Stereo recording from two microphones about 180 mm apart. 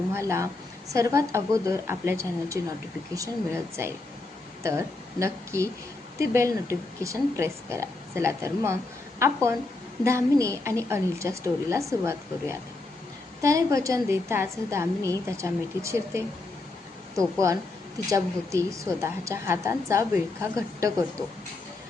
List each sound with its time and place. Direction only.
0.1 s speech: 15° right (ahead or behind)
17.4 s speech: 20° right (ahead or behind)